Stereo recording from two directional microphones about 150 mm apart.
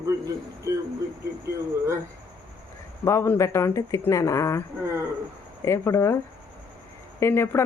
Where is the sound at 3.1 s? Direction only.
20° left (ahead or behind).